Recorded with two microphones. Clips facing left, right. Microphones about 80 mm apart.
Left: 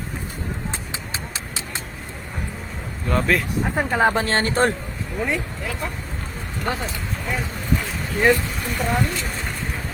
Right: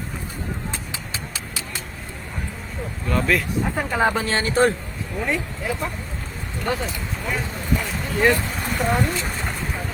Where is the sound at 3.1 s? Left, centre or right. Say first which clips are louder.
Left 1 dB; left.